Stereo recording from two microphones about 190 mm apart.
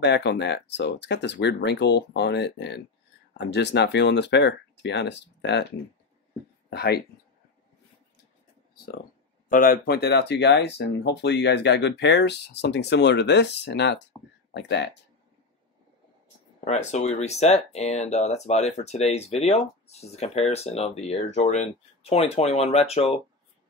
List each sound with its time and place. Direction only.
0.0 s speech: 65° left (ahead or behind)
6.7 s speech: 60° left (ahead or behind)
9.5 s speech: 50° left (ahead or behind); by 14.9 s 65° left (ahead or behind)
16.6 s speech: 35° left (ahead or behind)